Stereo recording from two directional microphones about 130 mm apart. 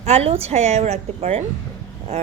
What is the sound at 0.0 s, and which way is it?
A woman's voice, 55° right (ahead or behind).